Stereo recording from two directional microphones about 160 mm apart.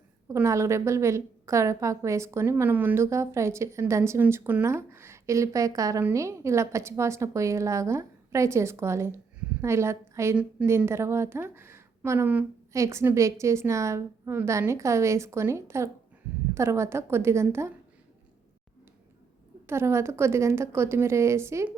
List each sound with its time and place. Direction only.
0.3 s a woman's voice: 20° right (ahead or behind)
19.6 s a woman's voice: 15° right (ahead or behind)